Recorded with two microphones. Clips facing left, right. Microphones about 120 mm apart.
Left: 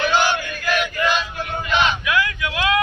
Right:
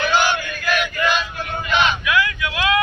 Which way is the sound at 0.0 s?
35° left (ahead or behind).